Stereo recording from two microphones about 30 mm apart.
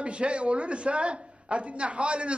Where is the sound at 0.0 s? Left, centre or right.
Right.